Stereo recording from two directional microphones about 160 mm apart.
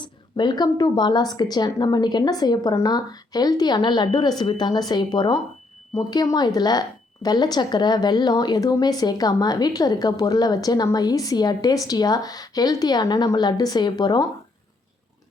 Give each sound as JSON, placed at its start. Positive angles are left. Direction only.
{"t": 0.0, "sound": "a woman's voice", "side_deg": 25}